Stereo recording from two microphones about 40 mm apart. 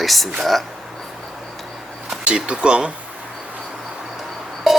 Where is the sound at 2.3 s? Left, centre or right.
Right.